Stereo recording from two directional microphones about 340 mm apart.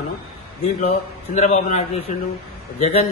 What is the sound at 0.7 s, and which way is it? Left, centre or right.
A man's voice, centre.